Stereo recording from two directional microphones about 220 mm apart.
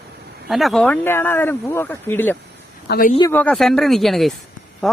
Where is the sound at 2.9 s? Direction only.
40° left (ahead or behind).